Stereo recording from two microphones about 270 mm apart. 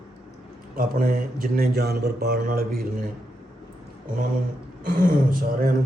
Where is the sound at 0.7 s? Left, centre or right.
Right.